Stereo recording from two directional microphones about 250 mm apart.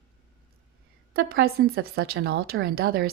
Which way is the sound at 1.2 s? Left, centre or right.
Right.